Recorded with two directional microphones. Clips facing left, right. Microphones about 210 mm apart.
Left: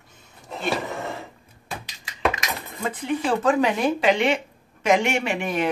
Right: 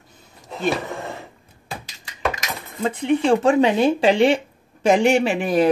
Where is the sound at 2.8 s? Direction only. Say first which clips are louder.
Right 6 dB; 25° right (ahead or behind).